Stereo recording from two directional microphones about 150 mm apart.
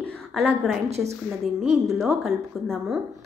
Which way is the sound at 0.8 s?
45° right (ahead or behind).